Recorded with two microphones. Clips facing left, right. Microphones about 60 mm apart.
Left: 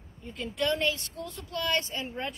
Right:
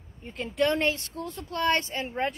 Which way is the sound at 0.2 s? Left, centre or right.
Right.